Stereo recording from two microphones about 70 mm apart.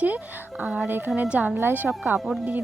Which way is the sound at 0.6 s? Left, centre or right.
Centre.